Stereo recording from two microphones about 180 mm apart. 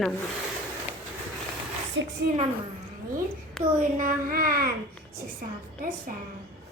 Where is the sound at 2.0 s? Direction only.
90° right.